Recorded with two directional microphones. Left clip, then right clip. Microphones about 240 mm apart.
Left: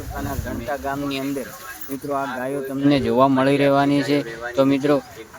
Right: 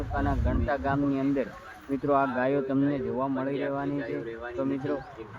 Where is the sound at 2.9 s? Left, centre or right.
Left.